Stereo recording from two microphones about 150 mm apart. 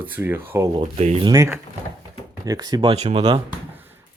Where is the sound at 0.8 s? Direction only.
45° right (ahead or behind).